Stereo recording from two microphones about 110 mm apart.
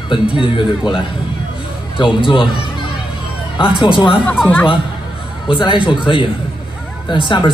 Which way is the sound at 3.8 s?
50° left (ahead or behind).